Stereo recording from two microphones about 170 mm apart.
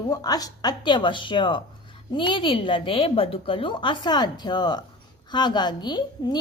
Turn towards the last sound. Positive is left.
turn(degrees=25)  # may be behind; listen again after turning